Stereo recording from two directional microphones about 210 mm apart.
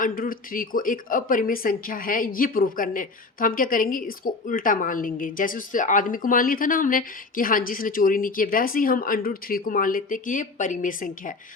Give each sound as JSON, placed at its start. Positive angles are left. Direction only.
{"t": 0.0, "sound": "a woman's voice", "side_deg": 40}